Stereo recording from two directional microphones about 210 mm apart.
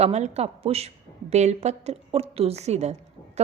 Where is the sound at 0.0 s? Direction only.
30° right (ahead or behind).